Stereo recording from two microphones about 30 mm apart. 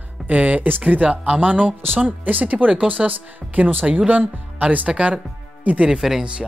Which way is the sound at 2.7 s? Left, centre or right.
Right.